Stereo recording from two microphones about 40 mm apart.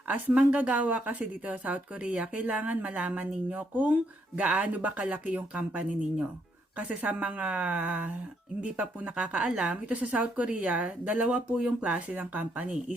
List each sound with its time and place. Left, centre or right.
0.1 s speech: right
9.6 s speech: right